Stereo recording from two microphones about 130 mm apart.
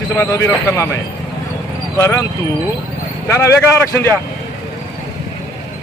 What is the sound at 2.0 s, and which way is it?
Speech, 25° left (ahead or behind).